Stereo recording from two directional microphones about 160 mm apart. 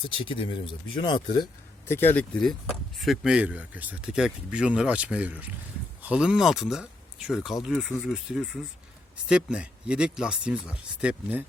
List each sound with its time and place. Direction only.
0.1 s speech: 35° left (ahead or behind)
1.9 s speech: 15° left (ahead or behind); by 11.4 s 10° right (ahead or behind)